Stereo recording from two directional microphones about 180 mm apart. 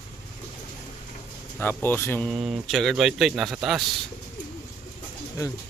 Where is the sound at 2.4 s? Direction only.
Centre (ahead or behind).